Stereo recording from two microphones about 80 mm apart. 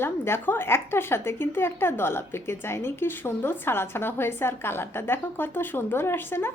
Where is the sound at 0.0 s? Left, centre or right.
Left.